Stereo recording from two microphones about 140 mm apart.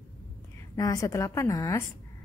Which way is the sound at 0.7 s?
25° left (ahead or behind).